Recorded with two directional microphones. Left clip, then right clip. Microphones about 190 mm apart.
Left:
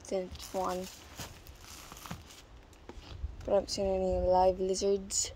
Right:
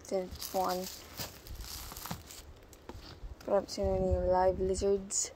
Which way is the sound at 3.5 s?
15° left (ahead or behind).